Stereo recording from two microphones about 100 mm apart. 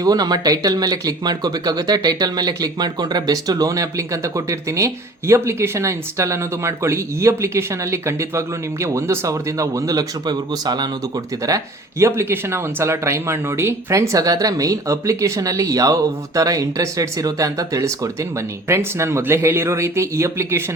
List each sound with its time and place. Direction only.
0.0 s speech: 40° right (ahead or behind)
11.4 s speech: 35° right (ahead or behind)